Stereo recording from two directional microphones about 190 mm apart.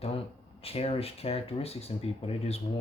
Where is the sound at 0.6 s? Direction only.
30° left (ahead or behind).